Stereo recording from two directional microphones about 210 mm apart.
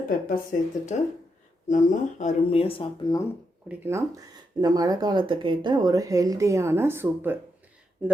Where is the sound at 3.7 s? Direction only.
10° right (ahead or behind).